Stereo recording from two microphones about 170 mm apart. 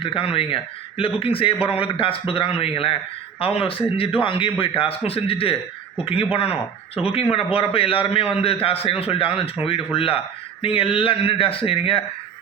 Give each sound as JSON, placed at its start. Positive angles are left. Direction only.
{"t": 0.0, "sound": "a man's voice", "side_deg": 30}